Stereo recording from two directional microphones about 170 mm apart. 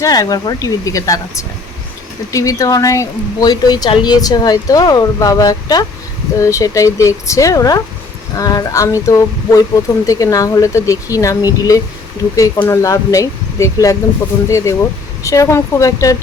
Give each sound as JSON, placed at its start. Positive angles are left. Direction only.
{"t": 0.0, "sound": "speech", "side_deg": 20}